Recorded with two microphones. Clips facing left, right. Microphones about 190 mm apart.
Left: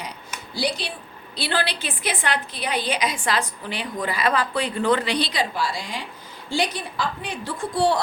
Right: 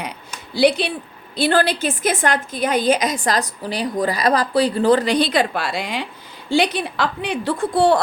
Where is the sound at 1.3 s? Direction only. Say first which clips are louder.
Right 9 dB; 45° right (ahead or behind).